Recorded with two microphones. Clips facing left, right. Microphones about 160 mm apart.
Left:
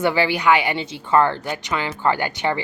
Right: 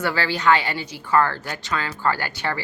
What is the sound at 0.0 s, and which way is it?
A woman's voice, 15° left (ahead or behind).